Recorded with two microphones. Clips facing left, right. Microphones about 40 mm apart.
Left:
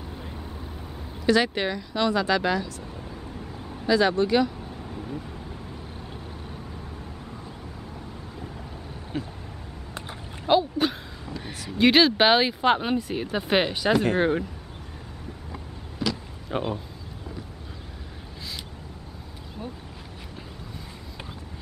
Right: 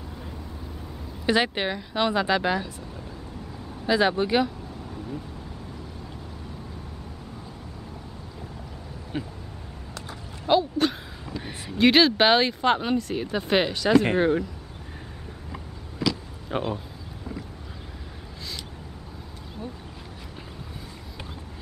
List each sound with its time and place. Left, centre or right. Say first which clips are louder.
1.2 s speech: left 1 dB; right
3.8 s speech: left 1 dB; centre
4.9 s vehicle: even; centre
9.1 s speech: even; centre
10.4 s a sound: even; centre
11.8 s speech: even; centre
16.4 s speech: even; centre